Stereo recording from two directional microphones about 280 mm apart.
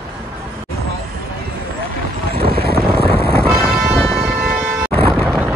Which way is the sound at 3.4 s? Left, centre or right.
Centre.